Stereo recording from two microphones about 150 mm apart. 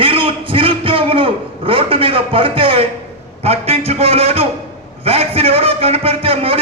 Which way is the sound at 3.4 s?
40° right (ahead or behind).